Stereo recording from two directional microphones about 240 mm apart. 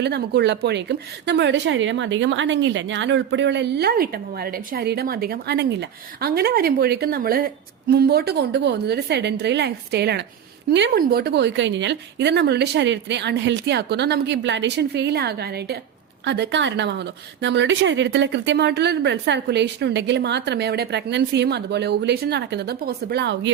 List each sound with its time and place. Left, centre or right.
0.0 s a woman's voice: right